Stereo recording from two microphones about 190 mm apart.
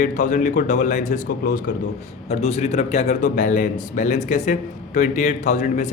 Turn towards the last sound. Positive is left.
turn(degrees=35)  # may be behind; listen again after turning